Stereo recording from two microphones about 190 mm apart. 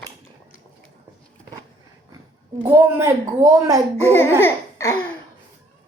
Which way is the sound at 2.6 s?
15° right (ahead or behind).